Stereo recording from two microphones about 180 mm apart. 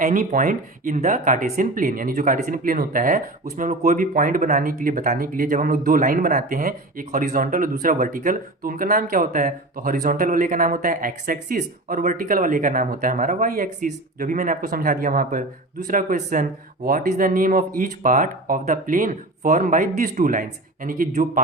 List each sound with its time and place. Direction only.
0.0 s speech: 50° right (ahead or behind)